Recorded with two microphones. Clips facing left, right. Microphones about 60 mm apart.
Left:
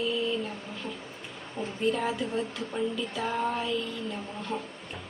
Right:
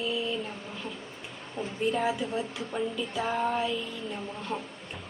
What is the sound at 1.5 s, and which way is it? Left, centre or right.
Speech, centre.